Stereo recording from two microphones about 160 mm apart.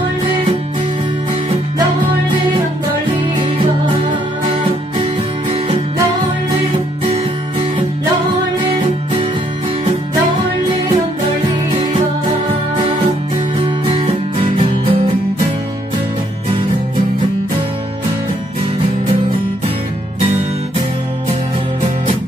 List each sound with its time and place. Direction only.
13.8 s music: 35° right (ahead or behind)